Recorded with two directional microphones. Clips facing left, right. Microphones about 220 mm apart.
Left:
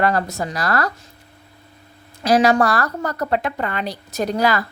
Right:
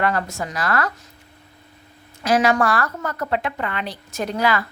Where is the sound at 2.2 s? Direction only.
35° left (ahead or behind).